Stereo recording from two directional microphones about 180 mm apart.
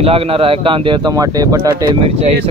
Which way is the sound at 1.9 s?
30° right (ahead or behind).